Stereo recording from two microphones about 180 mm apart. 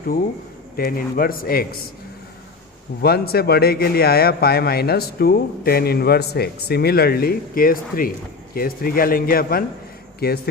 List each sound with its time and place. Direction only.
0.8 s a man's voice: 55° left (ahead or behind)
3.0 s a man's voice: 60° left (ahead or behind)